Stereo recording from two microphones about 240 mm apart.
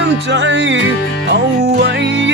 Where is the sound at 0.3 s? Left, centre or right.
Right.